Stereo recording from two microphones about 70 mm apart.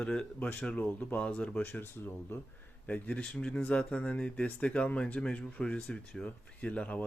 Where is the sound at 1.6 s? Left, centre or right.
Left.